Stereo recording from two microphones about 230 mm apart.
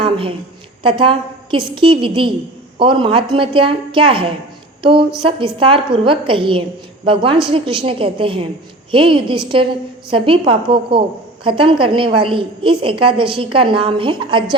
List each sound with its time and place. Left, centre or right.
0.0 s a woman's voice: right